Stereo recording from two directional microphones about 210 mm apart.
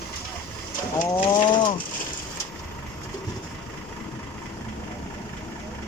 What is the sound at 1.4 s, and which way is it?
Bird, 20° left (ahead or behind).